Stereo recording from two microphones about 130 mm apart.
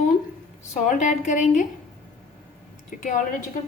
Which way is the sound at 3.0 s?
75° left (ahead or behind).